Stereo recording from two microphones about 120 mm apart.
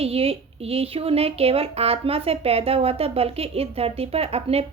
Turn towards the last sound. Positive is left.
turn(degrees=-55)  # may be behind; listen again after turning